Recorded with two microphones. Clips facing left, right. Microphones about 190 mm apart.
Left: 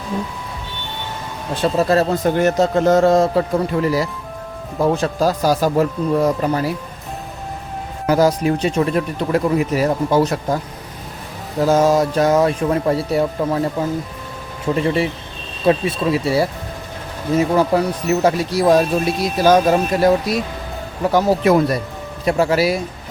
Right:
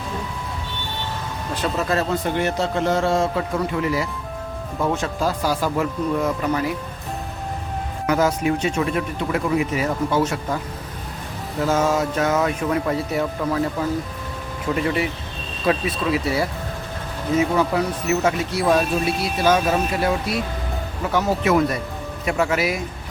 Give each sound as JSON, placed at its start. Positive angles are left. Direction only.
{"t": 1.6, "sound": "speech", "side_deg": 35}
{"t": 8.0, "sound": "speech", "side_deg": 35}
{"t": 11.6, "sound": "speech", "side_deg": 35}
{"t": 14.8, "sound": "speech", "side_deg": 30}
{"t": 17.7, "sound": "speech", "side_deg": 40}